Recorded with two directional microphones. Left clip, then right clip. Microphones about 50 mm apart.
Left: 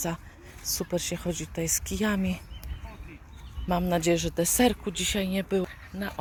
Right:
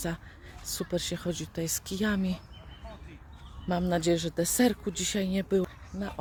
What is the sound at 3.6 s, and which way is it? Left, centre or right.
Speech, right.